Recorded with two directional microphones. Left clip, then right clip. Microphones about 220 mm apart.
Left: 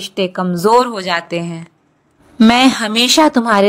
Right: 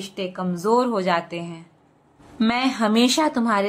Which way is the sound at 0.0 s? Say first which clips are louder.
Left 10 dB; 40° left (ahead or behind).